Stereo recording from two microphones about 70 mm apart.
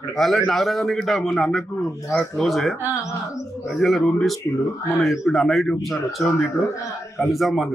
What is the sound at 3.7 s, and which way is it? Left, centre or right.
Speech, centre.